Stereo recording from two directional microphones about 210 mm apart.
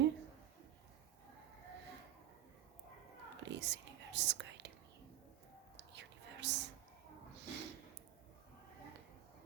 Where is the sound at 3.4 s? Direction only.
55° right (ahead or behind).